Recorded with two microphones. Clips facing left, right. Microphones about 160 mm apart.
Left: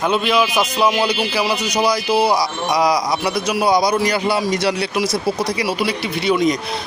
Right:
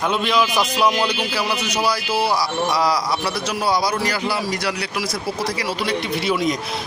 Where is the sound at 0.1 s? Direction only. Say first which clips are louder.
Left 3 dB; centre (ahead or behind).